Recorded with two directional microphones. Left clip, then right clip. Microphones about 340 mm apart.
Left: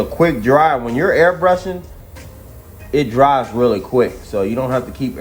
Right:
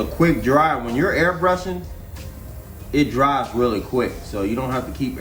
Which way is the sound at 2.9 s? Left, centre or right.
Left.